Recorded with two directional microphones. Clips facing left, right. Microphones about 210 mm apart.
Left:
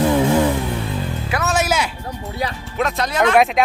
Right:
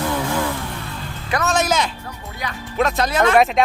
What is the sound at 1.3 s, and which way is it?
Music, 5° left (ahead or behind).